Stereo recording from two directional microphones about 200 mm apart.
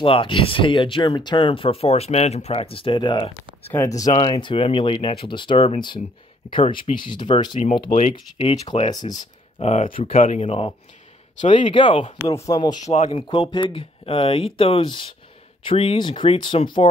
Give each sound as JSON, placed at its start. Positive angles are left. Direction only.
{"t": 0.0, "sound": "speech", "side_deg": 25}
{"t": 7.9, "sound": "speech", "side_deg": 40}
{"t": 9.6, "sound": "speech", "side_deg": 30}
{"t": 10.1, "sound": "speech", "side_deg": 40}
{"t": 12.8, "sound": "speech", "side_deg": 35}